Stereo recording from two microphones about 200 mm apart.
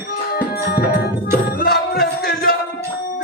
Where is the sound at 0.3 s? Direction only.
50° left (ahead or behind).